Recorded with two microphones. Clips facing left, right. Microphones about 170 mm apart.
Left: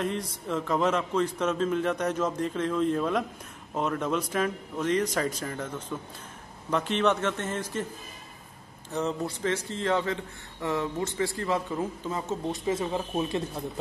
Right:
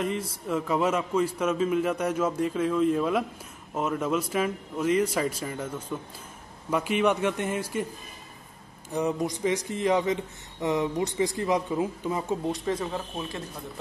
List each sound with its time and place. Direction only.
0.0 s speech: 5° right (ahead or behind)
8.9 s speech: 15° right (ahead or behind)
12.4 s speech: 5° left (ahead or behind)